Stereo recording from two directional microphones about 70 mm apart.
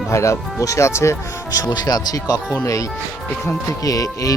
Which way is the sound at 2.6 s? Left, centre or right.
Left.